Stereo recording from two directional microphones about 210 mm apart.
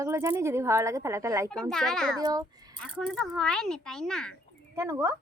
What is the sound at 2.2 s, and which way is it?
Speech, 20° right (ahead or behind).